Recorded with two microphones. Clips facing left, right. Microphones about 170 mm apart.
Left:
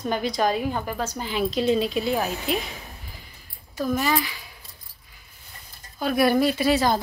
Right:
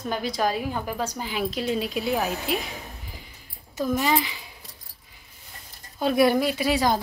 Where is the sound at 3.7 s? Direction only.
20° right (ahead or behind).